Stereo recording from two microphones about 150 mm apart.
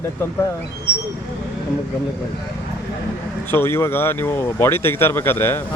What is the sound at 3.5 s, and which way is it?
Speech, 15° left (ahead or behind).